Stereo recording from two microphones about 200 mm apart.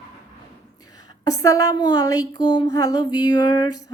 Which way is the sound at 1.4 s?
15° left (ahead or behind).